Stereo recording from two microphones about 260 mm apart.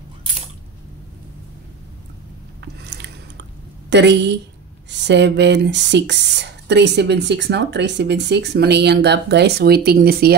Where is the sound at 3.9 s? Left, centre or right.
Right.